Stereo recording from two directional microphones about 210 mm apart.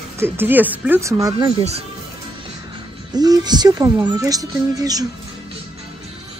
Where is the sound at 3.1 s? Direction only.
20° right (ahead or behind).